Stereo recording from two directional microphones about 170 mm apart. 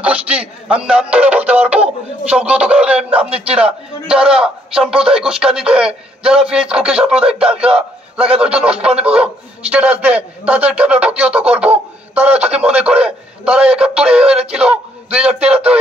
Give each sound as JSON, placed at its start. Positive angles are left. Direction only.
{"t": 0.0, "sound": "a man's voice", "side_deg": -10}
{"t": 3.3, "sound": "a man's voice", "side_deg": -35}
{"t": 3.5, "sound": "a man's voice", "side_deg": -5}